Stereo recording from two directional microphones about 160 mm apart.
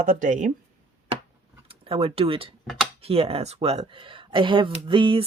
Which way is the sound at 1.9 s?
35° right (ahead or behind).